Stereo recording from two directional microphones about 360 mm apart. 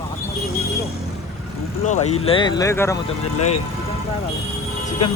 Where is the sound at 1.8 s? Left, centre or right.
Centre.